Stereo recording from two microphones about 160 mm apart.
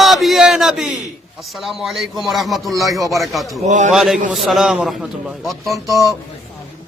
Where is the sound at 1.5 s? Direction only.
Centre (ahead or behind).